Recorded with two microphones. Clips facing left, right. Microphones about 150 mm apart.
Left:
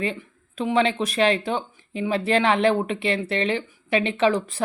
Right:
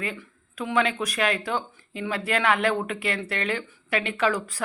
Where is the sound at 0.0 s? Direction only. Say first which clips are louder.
Left 5 dB; 25° left (ahead or behind).